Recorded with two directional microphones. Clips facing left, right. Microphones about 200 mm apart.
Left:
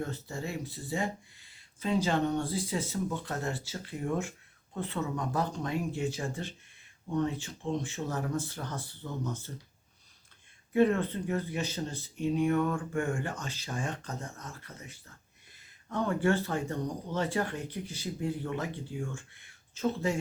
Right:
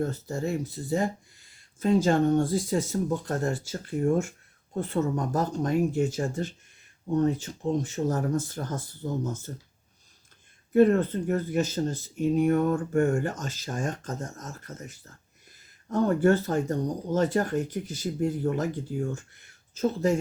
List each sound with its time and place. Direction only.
0.0 s speech: 40° right (ahead or behind)
10.7 s speech: 45° right (ahead or behind)